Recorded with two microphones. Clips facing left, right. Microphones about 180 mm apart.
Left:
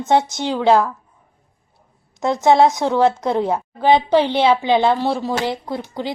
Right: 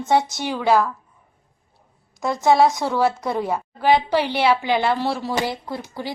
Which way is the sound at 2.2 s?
20° left (ahead or behind).